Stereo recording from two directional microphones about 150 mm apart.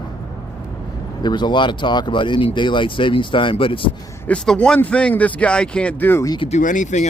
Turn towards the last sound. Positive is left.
turn(degrees=55)  # may be behind; listen again after turning